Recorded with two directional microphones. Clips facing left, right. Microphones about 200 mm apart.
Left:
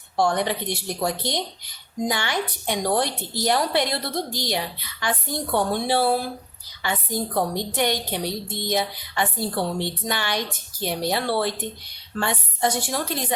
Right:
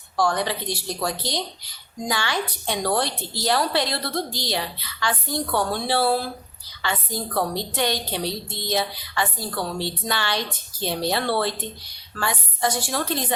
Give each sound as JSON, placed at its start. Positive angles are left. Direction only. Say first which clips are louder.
{"t": 0.2, "sound": "a woman's voice", "louder": "left 1 dB", "side_deg": 20}
{"t": 12.1, "sound": "speech", "louder": "left 2 dB", "side_deg": 25}